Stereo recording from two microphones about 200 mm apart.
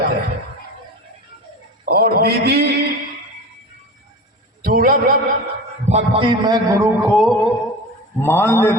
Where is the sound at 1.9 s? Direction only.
50° right (ahead or behind).